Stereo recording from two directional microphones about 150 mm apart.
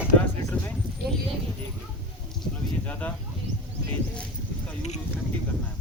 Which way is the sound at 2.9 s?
10° left (ahead or behind).